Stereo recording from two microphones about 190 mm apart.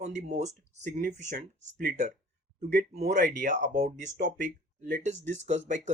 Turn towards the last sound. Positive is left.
turn(degrees=-40)  # may be behind; listen again after turning